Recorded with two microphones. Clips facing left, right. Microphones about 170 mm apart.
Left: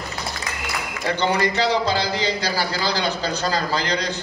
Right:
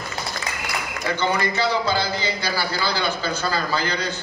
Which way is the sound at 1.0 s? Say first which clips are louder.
Left 2 dB; 35° left (ahead or behind).